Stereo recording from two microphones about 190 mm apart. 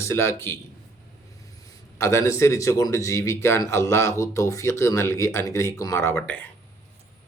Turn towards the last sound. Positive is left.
turn(degrees=10)  # may be behind; listen again after turning